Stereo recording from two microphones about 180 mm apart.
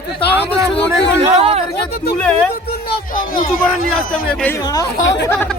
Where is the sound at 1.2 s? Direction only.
30° right (ahead or behind).